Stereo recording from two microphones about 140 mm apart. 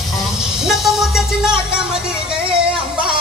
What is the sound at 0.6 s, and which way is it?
Vehicle, centre (ahead or behind).